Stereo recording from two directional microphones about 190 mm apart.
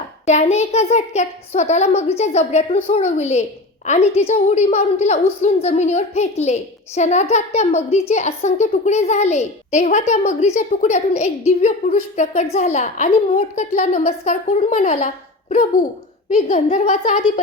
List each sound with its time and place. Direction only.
0.3 s a woman's voice: 35° left (ahead or behind)